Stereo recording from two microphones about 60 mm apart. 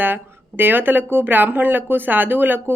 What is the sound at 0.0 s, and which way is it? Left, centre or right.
Speech, right.